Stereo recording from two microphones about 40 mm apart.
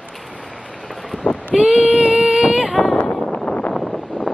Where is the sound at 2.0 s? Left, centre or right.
Right.